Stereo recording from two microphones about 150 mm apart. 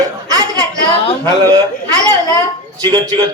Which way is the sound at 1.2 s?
25° right (ahead or behind).